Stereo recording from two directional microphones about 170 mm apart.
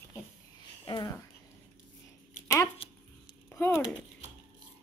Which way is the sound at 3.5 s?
15° left (ahead or behind).